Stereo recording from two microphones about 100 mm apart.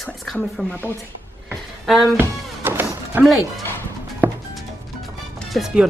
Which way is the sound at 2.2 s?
20° right (ahead or behind).